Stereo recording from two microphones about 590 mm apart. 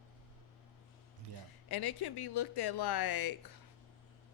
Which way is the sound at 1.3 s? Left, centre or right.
Right.